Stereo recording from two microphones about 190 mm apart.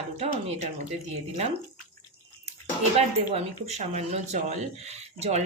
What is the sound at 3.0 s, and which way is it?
Speech, 35° right (ahead or behind).